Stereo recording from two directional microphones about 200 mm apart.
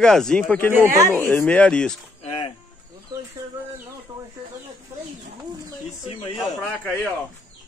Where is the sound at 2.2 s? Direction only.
25° left (ahead or behind).